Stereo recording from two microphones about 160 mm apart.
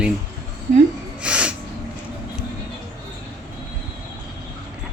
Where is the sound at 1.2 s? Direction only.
5° right (ahead or behind).